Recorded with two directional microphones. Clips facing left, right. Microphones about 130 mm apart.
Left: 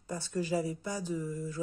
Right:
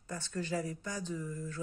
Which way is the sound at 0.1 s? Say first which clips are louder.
Left 4 dB; 15° left (ahead or behind).